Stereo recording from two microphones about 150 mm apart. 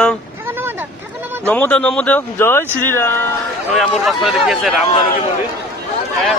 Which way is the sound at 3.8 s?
Centre (ahead or behind).